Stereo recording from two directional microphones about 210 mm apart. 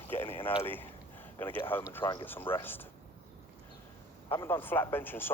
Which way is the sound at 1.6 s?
10° left (ahead or behind).